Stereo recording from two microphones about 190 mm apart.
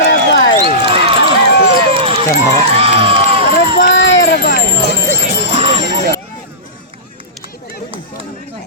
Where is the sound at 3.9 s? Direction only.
70° left (ahead or behind).